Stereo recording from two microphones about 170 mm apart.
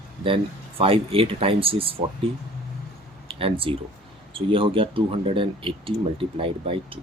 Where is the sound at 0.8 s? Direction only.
35° right (ahead or behind).